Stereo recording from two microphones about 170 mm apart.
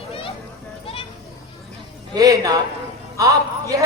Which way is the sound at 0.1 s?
30° left (ahead or behind).